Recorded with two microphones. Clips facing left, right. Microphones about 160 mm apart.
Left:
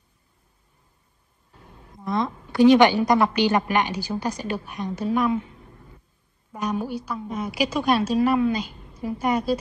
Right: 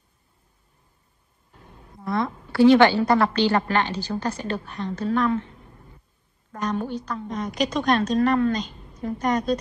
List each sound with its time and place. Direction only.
1.5 s a sound: centre (ahead or behind)
2.0 s a woman's voice: 20° left (ahead or behind)
6.5 s a woman's voice: 10° left (ahead or behind)